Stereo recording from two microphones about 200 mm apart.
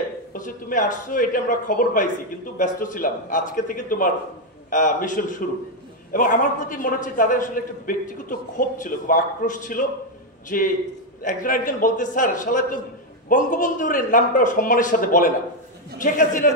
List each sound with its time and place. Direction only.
0.3 s a man's voice: 40° left (ahead or behind)